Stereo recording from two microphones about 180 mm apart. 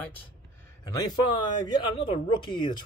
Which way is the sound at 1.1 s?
25° left (ahead or behind).